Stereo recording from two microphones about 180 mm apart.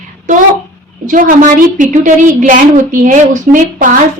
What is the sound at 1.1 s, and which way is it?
A woman's voice, 45° right (ahead or behind).